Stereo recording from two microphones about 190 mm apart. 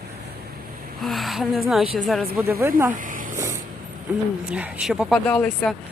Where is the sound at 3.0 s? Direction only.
45° right (ahead or behind).